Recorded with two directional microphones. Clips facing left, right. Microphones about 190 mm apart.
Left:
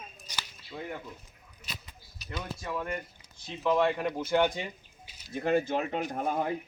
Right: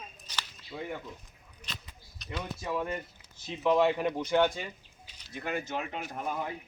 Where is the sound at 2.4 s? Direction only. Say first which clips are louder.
Right 3 dB; 15° right (ahead or behind).